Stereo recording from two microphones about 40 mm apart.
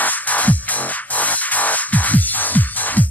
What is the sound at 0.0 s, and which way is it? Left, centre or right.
Music, left.